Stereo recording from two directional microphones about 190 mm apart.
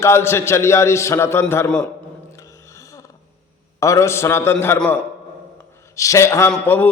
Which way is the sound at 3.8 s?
15° left (ahead or behind).